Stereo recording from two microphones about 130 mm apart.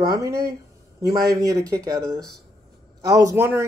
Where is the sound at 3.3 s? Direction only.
15° right (ahead or behind).